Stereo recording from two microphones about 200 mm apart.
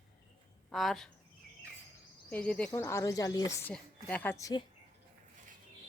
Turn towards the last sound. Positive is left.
turn(degrees=15)  # may be behind; listen again after turning